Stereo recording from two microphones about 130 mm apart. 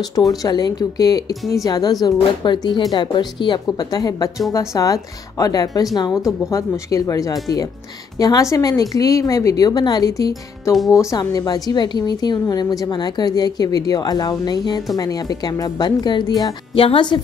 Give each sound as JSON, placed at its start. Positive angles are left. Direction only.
{"t": 0.1, "sound": "a woman's voice", "side_deg": 30}
{"t": 16.7, "sound": "a woman's voice", "side_deg": 45}